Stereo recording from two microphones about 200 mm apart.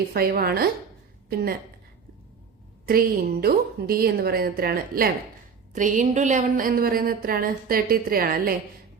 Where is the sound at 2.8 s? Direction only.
50° right (ahead or behind).